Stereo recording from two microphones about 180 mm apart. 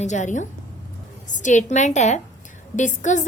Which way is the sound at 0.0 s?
40° left (ahead or behind).